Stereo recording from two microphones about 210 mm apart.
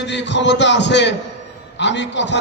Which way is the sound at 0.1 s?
55° left (ahead or behind).